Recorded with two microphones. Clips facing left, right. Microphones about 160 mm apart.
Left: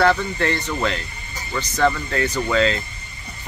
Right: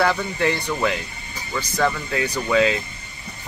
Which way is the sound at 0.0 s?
10° right (ahead or behind).